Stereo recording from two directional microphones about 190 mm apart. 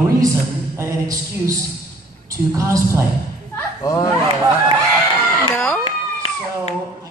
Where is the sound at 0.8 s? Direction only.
15° right (ahead or behind).